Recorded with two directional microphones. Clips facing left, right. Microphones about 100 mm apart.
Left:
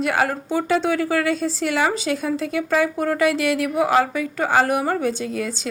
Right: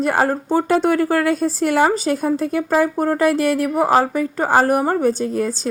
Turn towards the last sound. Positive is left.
turn(degrees=-40)  # may be behind; listen again after turning